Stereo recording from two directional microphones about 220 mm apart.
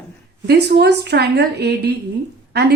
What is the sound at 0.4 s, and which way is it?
A woman's voice, 50° right (ahead or behind).